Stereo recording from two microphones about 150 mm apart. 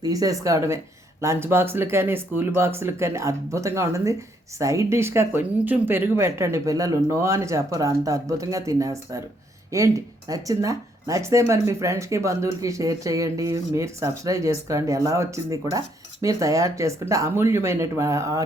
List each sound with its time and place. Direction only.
0.0 s speech: 25° right (ahead or behind)